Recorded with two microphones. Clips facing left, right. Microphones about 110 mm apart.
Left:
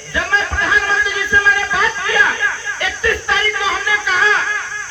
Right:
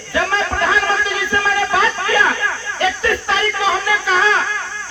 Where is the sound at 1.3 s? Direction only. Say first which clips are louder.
Left 1 dB; 35° right (ahead or behind).